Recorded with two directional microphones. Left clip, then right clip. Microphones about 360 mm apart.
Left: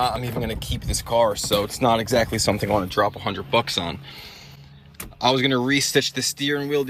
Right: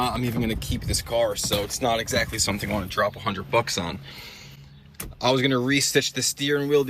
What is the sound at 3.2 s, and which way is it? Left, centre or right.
Speech, centre.